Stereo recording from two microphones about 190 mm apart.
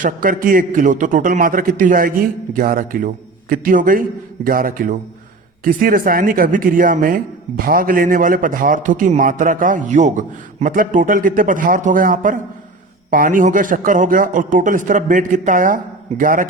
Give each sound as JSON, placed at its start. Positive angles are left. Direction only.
{"t": 0.0, "sound": "a man's voice", "side_deg": -45}